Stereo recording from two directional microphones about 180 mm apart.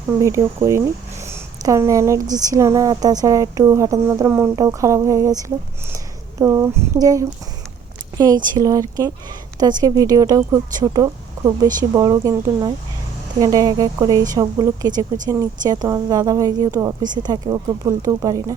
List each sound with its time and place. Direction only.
0.2 s speech: 15° right (ahead or behind)
8.4 s a woman's voice: 20° right (ahead or behind)